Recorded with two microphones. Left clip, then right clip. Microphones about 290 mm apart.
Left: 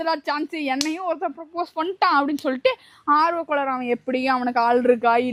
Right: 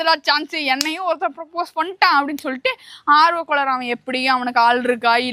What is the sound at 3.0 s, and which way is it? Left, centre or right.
Speech, right.